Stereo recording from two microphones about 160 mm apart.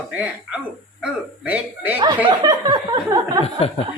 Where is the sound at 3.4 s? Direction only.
40° left (ahead or behind).